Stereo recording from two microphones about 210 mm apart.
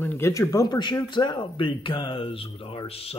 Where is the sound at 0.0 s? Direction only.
10° left (ahead or behind).